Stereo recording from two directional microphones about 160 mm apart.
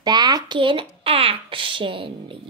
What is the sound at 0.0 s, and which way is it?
Speech, 25° right (ahead or behind).